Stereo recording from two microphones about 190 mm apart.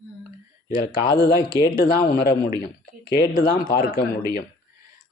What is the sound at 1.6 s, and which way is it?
A man's voice, 50° left (ahead or behind).